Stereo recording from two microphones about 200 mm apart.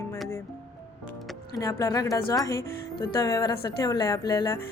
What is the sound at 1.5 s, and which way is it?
A woman's voice, 15° left (ahead or behind).